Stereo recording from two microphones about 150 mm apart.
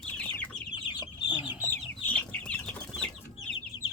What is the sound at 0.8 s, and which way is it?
Chicken, 30° left (ahead or behind).